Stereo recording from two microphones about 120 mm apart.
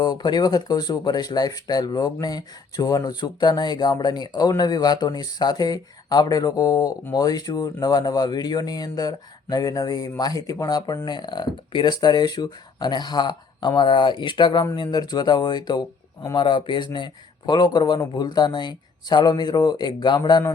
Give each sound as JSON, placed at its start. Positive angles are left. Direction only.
{"t": 0.0, "sound": "speech", "side_deg": 35}